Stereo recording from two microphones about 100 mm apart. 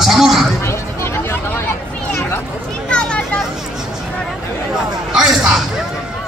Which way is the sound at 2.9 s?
10° left (ahead or behind).